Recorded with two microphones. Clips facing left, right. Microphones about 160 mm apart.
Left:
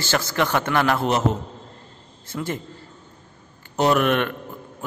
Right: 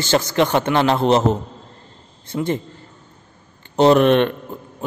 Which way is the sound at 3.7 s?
25° right (ahead or behind).